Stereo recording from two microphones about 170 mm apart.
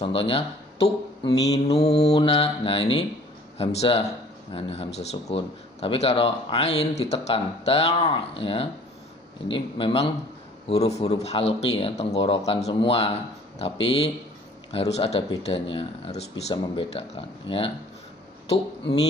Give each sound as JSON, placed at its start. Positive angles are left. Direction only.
{"t": 0.0, "sound": "a man's voice", "side_deg": 30}
{"t": 1.3, "sound": "mantra", "side_deg": 20}
{"t": 1.7, "sound": "a man's voice", "side_deg": 35}